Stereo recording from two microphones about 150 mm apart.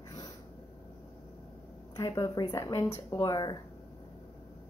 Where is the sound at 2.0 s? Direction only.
20° left (ahead or behind).